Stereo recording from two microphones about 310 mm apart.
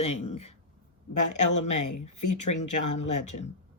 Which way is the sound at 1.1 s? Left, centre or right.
Left.